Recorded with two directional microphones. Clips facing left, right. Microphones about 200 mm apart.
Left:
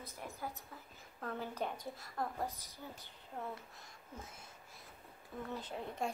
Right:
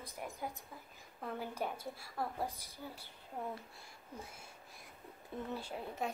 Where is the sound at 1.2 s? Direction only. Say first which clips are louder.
Even; 10° right (ahead or behind).